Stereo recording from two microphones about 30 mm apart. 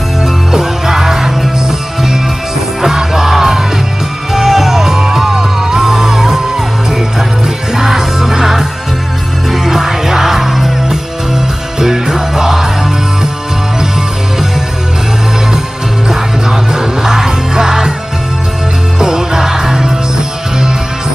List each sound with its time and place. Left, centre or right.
0.2 s music: centre
16.1 s music: right
18.9 s music: right